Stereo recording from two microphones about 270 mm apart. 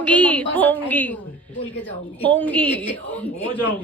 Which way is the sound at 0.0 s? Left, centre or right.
Centre.